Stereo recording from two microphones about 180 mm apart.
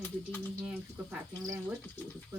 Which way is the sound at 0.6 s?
10° right (ahead or behind).